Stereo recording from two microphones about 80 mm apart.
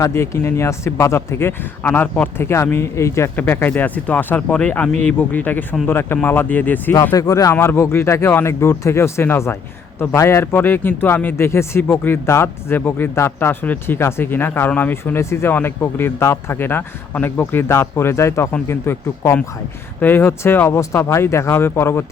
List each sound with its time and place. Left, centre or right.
0.0 s speech: left
3.3 s speech: left
6.9 s speech: left
7.5 s speech: left
15.2 s speech: left